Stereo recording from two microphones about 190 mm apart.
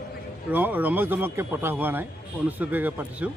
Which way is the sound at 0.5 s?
10° right (ahead or behind).